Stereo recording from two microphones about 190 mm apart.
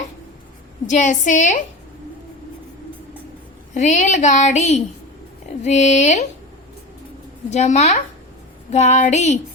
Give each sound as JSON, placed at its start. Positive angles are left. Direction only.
{"t": 0.9, "sound": "a woman's voice", "side_deg": 40}
{"t": 3.8, "sound": "a woman's voice", "side_deg": 40}
{"t": 7.5, "sound": "a woman's voice", "side_deg": 35}